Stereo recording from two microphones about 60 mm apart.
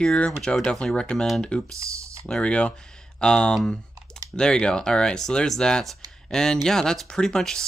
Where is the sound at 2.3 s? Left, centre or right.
Centre.